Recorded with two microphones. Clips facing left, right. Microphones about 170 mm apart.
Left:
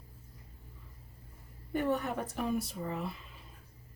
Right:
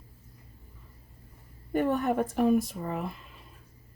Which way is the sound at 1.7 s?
50° right (ahead or behind).